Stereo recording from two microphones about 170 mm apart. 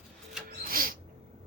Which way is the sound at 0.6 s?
60° right (ahead or behind).